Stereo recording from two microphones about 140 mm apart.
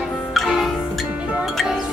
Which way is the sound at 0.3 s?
Centre (ahead or behind).